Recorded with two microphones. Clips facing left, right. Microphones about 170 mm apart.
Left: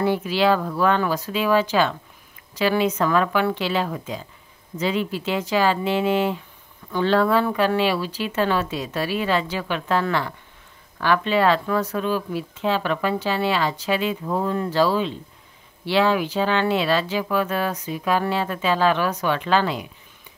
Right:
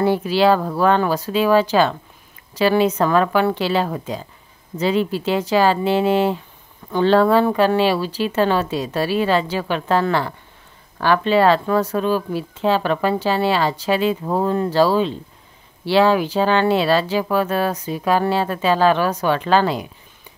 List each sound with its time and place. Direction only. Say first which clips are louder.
0.0 s speech: right 4 dB; 35° right (ahead or behind)